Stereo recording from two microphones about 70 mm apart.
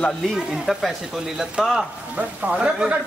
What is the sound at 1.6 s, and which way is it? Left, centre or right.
Speech, centre.